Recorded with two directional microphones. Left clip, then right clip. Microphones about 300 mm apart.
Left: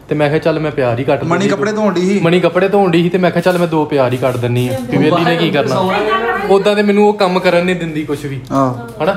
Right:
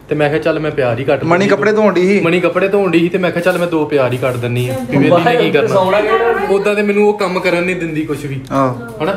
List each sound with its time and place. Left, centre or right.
0.2 s speech: left
1.3 s a man's voice: centre
2.2 s speech: left